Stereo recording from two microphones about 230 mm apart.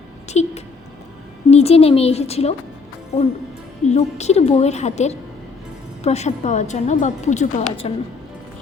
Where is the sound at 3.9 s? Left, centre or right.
Left.